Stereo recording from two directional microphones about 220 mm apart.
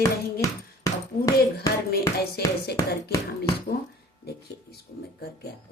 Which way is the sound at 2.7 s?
15° left (ahead or behind).